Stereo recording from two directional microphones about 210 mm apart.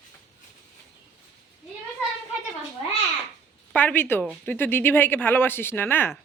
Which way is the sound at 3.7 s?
5° left (ahead or behind).